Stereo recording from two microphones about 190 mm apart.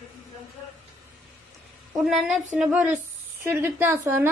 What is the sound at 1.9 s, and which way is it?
A woman's voice, 5° right (ahead or behind).